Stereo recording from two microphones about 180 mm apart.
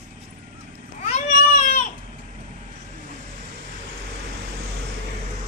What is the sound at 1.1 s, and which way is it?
Baby cry, 45° left (ahead or behind).